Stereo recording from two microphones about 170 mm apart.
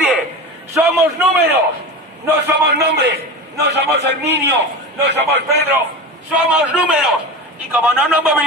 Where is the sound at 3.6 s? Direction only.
80° right.